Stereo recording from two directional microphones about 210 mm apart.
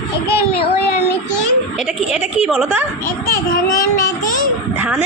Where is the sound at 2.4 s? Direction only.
5° right (ahead or behind).